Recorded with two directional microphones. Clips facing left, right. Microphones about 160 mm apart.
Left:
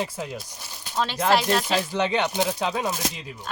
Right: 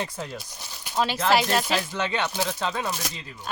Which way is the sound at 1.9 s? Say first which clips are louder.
Left 4 dB; 20° left (ahead or behind).